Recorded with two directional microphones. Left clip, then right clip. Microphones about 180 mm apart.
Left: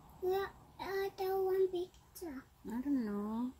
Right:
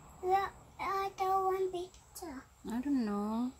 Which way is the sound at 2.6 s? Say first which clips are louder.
Right 3 dB; 20° right (ahead or behind).